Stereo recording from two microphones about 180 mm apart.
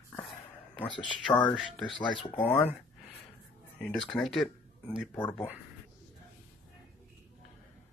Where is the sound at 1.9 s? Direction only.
30° left (ahead or behind).